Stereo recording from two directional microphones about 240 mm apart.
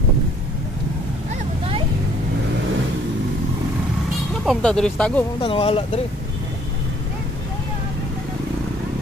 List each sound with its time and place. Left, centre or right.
4.5 s speech: centre
5.4 s speech: left